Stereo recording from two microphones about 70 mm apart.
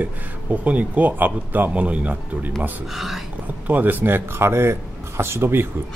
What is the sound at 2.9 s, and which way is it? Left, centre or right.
Speech, centre.